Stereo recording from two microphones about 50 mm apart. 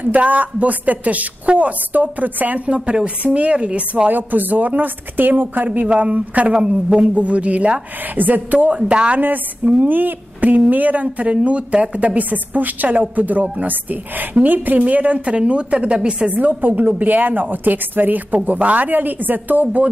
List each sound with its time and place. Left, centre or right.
0.0 s a woman's voice: right
4.1 s a woman's voice: right
6.5 s a woman's voice: centre
9.8 s a woman's voice: right
16.3 s a woman's voice: right